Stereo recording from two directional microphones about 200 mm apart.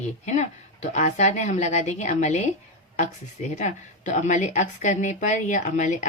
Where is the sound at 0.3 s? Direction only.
35° left (ahead or behind).